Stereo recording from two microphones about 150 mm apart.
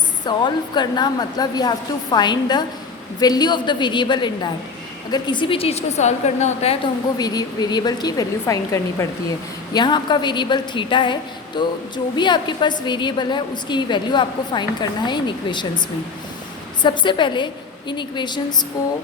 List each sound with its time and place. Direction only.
0.3 s a woman's voice: 30° left (ahead or behind); by 6.7 s 45° left (ahead or behind)
7.2 s a woman's voice: 25° left (ahead or behind)
16.8 s a woman's voice: 30° left (ahead or behind)